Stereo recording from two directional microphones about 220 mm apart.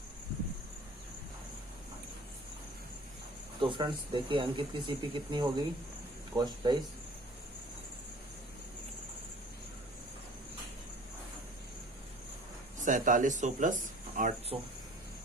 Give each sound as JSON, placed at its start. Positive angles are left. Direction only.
{"t": 3.6, "sound": "speech", "side_deg": -20}
{"t": 12.8, "sound": "speech", "side_deg": -35}